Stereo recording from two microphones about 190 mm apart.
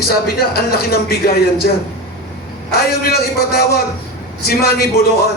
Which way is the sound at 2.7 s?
55° left (ahead or behind).